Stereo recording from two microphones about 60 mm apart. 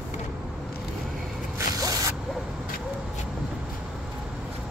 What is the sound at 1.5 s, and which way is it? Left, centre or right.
Zipper, right.